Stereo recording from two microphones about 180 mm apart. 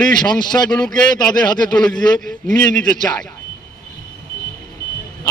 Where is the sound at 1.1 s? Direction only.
25° left (ahead or behind).